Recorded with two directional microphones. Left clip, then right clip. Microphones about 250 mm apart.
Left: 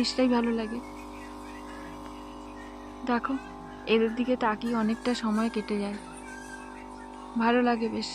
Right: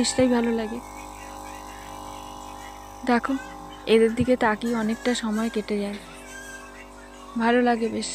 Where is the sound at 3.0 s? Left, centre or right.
Centre.